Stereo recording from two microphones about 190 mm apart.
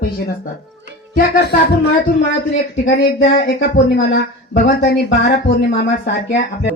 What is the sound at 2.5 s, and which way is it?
Speech, 70° left (ahead or behind).